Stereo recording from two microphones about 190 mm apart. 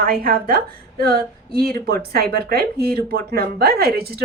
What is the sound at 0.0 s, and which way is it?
A woman's voice, 50° right (ahead or behind).